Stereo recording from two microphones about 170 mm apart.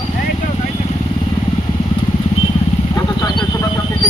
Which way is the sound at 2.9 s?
20° left (ahead or behind).